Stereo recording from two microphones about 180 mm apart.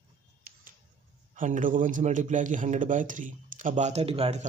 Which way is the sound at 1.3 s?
45° right (ahead or behind).